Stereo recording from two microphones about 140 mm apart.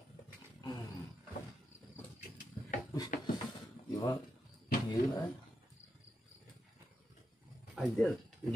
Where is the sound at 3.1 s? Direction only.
70° left (ahead or behind).